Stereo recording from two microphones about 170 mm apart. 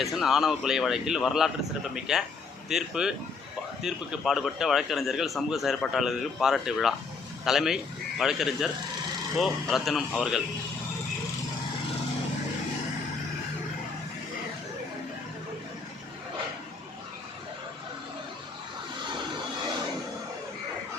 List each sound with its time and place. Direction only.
0.0 s a man's voice: centre (ahead or behind)